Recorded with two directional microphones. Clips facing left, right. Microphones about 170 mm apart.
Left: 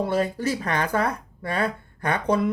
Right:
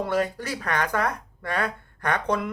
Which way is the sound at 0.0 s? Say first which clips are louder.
Left 2 dB; 30° left (ahead or behind).